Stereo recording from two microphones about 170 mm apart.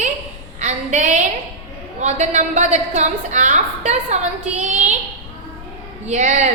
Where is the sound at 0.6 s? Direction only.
45° right (ahead or behind).